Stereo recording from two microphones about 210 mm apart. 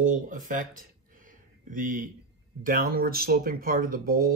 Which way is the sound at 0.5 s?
40° right (ahead or behind).